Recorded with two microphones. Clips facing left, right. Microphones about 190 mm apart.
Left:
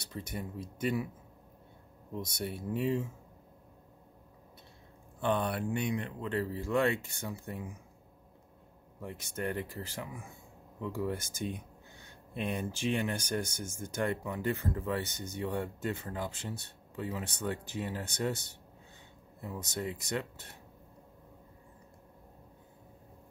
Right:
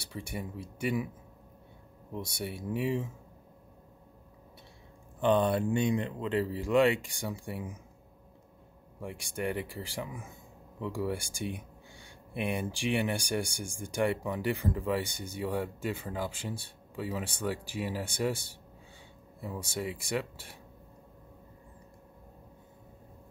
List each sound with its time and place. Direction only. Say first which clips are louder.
0.0 s speech: right 1 dB; 10° right (ahead or behind)
2.8 s speech: even; 10° right (ahead or behind)
5.2 s speech: right 5 dB; 20° right (ahead or behind)
9.0 s speech: right 2 dB; 10° right (ahead or behind)